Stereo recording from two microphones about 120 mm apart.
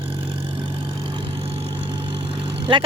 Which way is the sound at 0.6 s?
45° right (ahead or behind).